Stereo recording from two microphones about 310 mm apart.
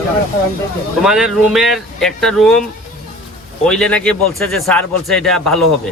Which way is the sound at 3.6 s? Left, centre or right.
Centre.